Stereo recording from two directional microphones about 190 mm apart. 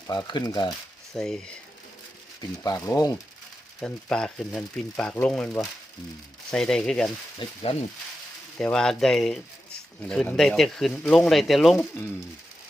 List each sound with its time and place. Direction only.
0.1 s speech: 20° left (ahead or behind)
1.1 s speech: 5° left (ahead or behind)
2.6 s speech: 20° left (ahead or behind)
3.8 s speech: 5° left (ahead or behind)
7.3 s speech: 30° left (ahead or behind)
8.5 s speech: 5° left (ahead or behind)